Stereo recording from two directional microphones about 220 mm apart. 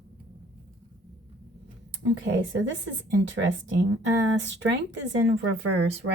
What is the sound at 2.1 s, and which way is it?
A woman's voice, 55° right (ahead or behind).